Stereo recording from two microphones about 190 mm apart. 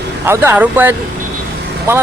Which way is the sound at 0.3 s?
10° right (ahead or behind).